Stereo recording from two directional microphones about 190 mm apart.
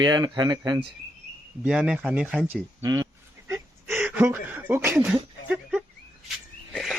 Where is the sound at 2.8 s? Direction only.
15° right (ahead or behind).